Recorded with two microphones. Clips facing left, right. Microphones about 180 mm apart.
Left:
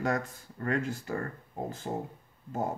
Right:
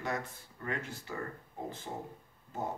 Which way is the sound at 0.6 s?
45° left (ahead or behind).